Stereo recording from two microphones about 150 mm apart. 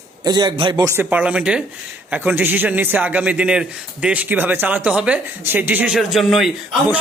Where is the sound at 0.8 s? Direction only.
15° right (ahead or behind).